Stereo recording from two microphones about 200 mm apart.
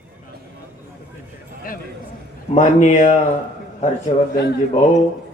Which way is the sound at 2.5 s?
35° left (ahead or behind).